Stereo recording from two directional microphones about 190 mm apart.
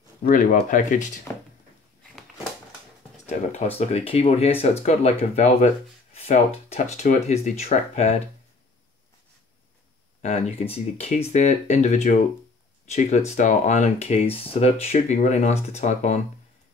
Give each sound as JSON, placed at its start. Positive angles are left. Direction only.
{"t": 0.2, "sound": "speech", "side_deg": 45}
{"t": 3.3, "sound": "speech", "side_deg": 35}
{"t": 10.2, "sound": "speech", "side_deg": 35}
{"t": 13.3, "sound": "speech", "side_deg": 40}